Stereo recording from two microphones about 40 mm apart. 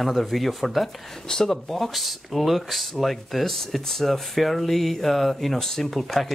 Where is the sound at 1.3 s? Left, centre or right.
Centre.